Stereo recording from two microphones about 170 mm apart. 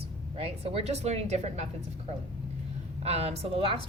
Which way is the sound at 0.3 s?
35° right (ahead or behind).